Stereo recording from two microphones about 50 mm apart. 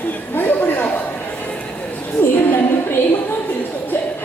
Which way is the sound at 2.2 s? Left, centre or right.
Left.